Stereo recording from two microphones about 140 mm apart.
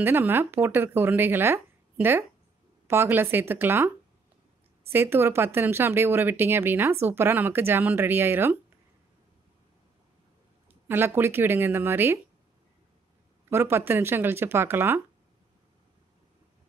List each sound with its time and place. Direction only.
0.0 s speech: 15° right (ahead or behind)
4.9 s speech: 15° right (ahead or behind)
10.7 s speech: 15° right (ahead or behind)
13.5 s speech: 15° right (ahead or behind)